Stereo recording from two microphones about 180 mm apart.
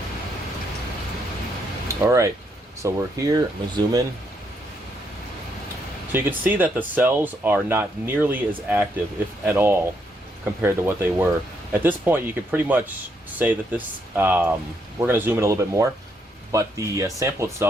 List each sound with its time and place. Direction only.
1.9 s speech: 15° right (ahead or behind)
6.1 s speech: 10° right (ahead or behind)